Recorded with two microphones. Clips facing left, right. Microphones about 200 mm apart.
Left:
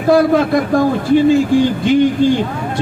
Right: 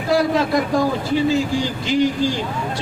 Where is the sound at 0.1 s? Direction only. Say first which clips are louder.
Left 6 dB; 55° left (ahead or behind).